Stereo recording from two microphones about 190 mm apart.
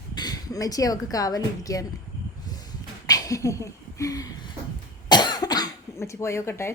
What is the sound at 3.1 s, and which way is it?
Speech, 20° left (ahead or behind).